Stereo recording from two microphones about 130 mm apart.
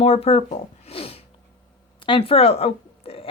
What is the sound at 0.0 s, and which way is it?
Speech, 50° left (ahead or behind).